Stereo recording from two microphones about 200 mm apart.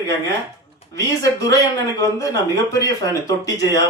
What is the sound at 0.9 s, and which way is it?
Speech, 15° left (ahead or behind).